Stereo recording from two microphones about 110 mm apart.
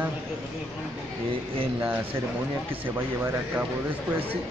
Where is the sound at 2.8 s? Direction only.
20° right (ahead or behind).